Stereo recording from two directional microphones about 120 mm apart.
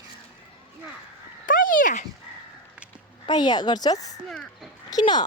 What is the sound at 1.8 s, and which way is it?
Speech, 90° left.